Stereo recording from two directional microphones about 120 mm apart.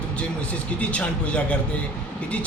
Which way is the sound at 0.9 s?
10° left (ahead or behind).